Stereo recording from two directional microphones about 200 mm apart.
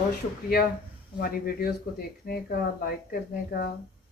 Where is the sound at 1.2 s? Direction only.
50° left (ahead or behind).